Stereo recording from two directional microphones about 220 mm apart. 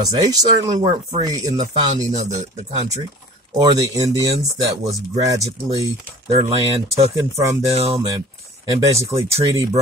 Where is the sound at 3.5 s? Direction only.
15° right (ahead or behind).